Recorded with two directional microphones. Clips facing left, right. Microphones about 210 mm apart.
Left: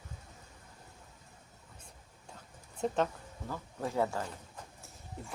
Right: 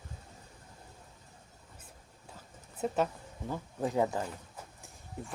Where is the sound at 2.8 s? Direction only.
5° right (ahead or behind).